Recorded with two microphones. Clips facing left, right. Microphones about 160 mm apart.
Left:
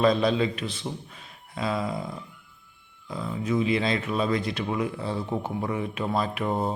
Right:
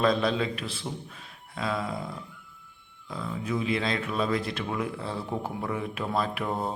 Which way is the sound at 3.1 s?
Centre (ahead or behind).